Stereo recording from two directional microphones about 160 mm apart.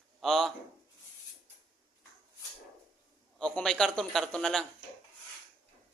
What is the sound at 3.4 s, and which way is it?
A man's voice, 5° left (ahead or behind).